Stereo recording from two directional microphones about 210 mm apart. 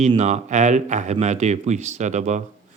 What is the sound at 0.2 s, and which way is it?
Speech, 35° right (ahead or behind).